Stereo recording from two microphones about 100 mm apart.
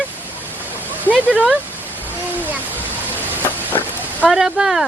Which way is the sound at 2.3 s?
20° right (ahead or behind).